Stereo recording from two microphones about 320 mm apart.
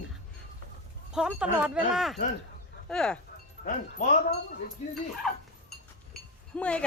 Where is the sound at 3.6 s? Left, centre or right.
Left.